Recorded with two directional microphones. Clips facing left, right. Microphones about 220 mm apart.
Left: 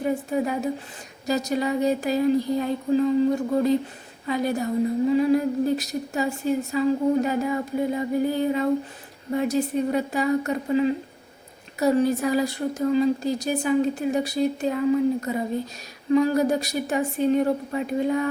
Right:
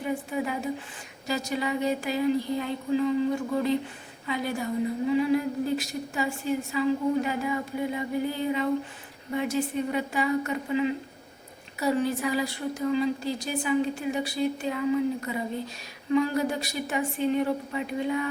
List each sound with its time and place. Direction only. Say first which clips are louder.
0.0 s a woman's voice: left 5 dB; 40° left (ahead or behind)